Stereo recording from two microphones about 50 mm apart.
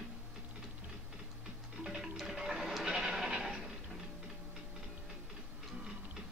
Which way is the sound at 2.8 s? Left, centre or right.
Centre.